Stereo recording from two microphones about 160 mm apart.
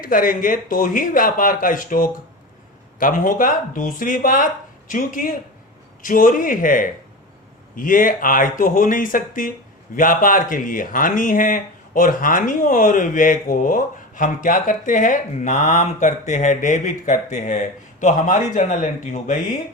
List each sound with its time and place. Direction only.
0.0 s speech: 60° left (ahead or behind)